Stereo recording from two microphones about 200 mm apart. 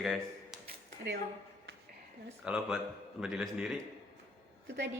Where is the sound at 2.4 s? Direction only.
5° right (ahead or behind).